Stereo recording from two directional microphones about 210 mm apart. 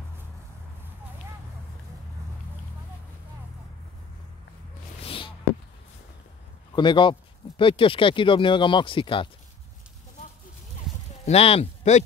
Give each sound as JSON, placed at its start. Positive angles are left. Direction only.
{"t": 5.0, "sound": "a sound", "side_deg": 25}
{"t": 6.7, "sound": "speech", "side_deg": 20}
{"t": 11.2, "sound": "speech", "side_deg": 30}